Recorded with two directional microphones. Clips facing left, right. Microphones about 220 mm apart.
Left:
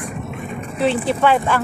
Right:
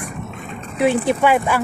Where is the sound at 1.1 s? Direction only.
15° right (ahead or behind).